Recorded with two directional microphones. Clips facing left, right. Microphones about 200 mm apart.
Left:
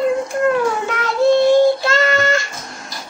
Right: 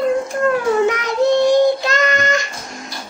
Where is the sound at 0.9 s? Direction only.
20° right (ahead or behind).